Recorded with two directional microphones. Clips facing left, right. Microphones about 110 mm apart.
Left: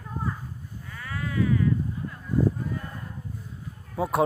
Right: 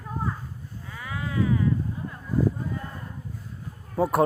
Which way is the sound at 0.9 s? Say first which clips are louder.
Right 1 dB; 15° right (ahead or behind).